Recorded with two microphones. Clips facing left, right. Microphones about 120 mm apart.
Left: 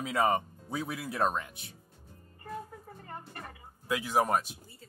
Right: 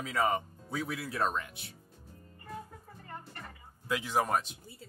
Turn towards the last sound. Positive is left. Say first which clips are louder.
# left 2 dB
turn(degrees=10)  # may be behind; listen again after turning